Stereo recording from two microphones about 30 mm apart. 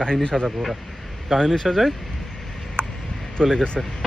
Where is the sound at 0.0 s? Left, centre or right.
Left.